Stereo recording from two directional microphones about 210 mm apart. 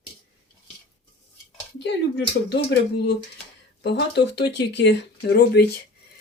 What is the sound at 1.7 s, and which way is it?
Speech, 55° left (ahead or behind).